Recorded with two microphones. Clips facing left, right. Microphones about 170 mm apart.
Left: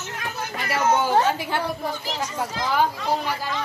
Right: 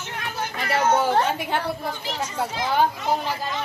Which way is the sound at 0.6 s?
30° right (ahead or behind).